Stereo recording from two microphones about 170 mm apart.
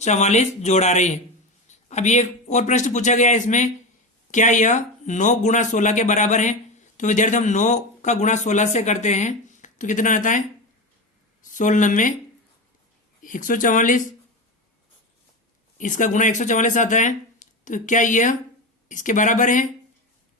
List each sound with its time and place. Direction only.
0.0 s a man's voice: 40° left (ahead or behind)
11.5 s speech: 50° left (ahead or behind)
13.2 s speech: 50° left (ahead or behind)
15.8 s speech: 50° left (ahead or behind)